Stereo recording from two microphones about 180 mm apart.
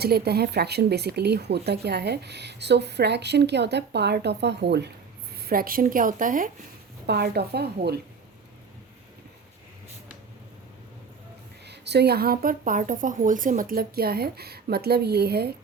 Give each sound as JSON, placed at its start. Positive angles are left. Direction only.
{"t": 0.0, "sound": "speech", "side_deg": -60}
{"t": 5.4, "sound": "a woman's voice", "side_deg": -55}
{"t": 7.1, "sound": "speech", "side_deg": -65}
{"t": 11.6, "sound": "speech", "side_deg": -70}